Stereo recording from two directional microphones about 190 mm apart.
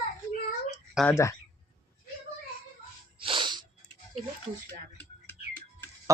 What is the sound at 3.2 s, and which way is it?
Snort, 25° right (ahead or behind).